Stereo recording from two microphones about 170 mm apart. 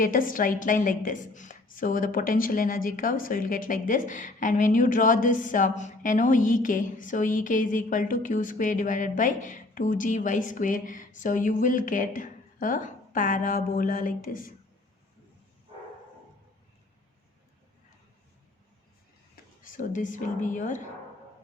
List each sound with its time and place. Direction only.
0.0 s a woman's voice: 55° left (ahead or behind)
19.6 s a woman's voice: 50° left (ahead or behind)